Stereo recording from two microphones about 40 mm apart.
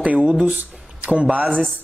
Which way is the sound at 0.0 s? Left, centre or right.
Right.